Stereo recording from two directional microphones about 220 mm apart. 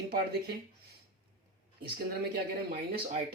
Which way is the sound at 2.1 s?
45° right (ahead or behind).